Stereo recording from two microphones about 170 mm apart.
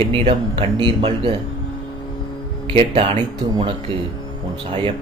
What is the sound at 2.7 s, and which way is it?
Speech, 35° right (ahead or behind).